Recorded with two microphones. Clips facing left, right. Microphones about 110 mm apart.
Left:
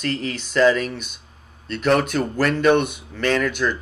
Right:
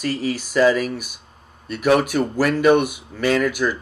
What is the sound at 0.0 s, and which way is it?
Speech, 5° right (ahead or behind).